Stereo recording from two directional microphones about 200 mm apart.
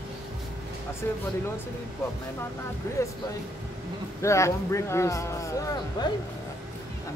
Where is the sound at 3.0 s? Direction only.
15° left (ahead or behind).